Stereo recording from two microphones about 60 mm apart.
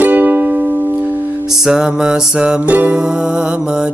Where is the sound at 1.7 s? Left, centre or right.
Centre.